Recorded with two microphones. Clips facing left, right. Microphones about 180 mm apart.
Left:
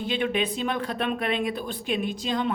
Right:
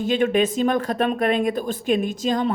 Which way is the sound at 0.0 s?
45° right (ahead or behind).